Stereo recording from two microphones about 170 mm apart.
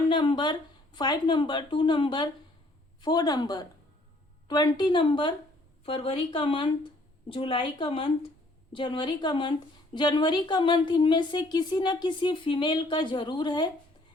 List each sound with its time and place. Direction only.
0.1 s speech: 30° left (ahead or behind)